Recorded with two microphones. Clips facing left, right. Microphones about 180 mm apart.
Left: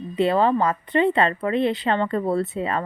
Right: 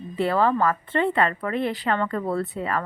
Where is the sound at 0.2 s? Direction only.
20° left (ahead or behind).